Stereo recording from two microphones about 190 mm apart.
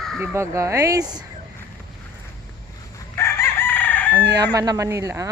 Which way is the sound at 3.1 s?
15° left (ahead or behind).